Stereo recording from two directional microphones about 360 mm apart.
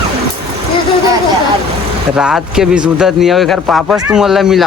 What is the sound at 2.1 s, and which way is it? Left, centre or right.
Speech, centre.